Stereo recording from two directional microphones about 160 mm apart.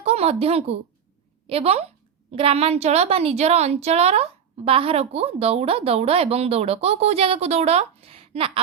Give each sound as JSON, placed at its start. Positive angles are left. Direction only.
{"t": 0.0, "sound": "a woman's voice", "side_deg": -40}